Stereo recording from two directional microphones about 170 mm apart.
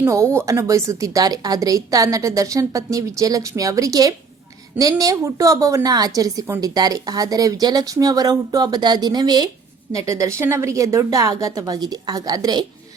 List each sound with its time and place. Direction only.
0.0 s a woman's voice: 15° right (ahead or behind)